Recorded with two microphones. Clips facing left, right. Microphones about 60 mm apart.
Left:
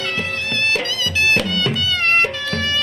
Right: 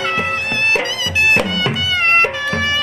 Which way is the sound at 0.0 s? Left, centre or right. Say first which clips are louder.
Right 5 dB; right.